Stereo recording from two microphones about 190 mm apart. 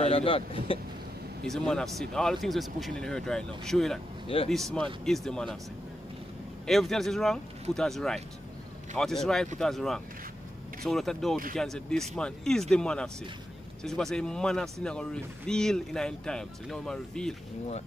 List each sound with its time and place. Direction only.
0.0 s speech: 30° left (ahead or behind)
1.5 s speech: 5° left (ahead or behind)
6.6 s speech: centre (ahead or behind)